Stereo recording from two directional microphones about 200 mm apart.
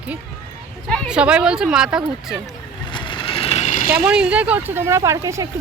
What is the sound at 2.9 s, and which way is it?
Vehicle, 25° left (ahead or behind).